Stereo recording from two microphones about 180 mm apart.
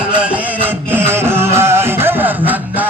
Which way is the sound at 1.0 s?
15° right (ahead or behind).